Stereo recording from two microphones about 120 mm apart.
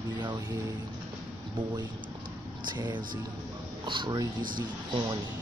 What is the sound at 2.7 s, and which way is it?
Speech, 35° right (ahead or behind).